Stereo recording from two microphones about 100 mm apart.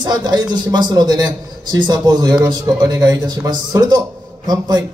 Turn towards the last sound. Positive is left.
turn(degrees=-40)  # may be behind; listen again after turning